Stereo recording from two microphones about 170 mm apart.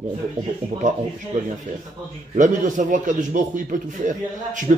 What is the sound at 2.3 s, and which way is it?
A man's voice, 50° right (ahead or behind).